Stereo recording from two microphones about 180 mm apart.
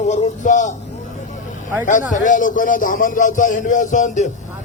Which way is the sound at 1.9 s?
45° left (ahead or behind).